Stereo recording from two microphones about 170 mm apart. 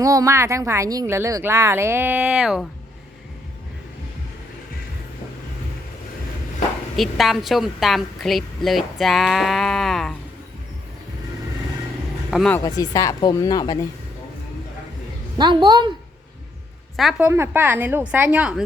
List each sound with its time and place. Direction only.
0.0 s speech: 20° right (ahead or behind); by 2.6 s 5° right (ahead or behind)
6.9 s a woman's voice: centre (ahead or behind)
12.3 s a woman's voice: 5° right (ahead or behind)
12.6 s speech: 20° left (ahead or behind)
15.4 s a woman's voice: 25° right (ahead or behind)
17.0 s speech: 5° right (ahead or behind)